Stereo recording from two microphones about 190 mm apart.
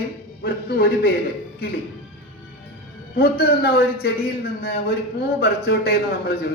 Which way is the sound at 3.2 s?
55° left (ahead or behind).